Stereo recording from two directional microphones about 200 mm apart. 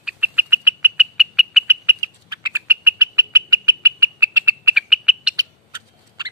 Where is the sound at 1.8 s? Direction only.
15° right (ahead or behind).